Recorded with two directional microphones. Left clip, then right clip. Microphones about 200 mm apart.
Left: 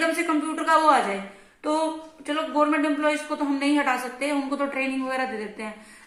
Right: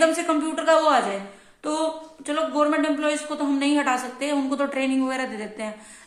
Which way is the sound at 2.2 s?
40° right (ahead or behind).